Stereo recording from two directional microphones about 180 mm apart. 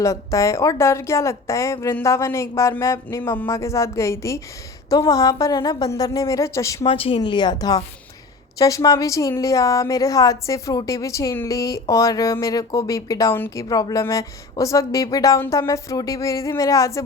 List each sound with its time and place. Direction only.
0.0 s a woman's voice: 15° left (ahead or behind)
6.8 s a woman's voice: 30° left (ahead or behind)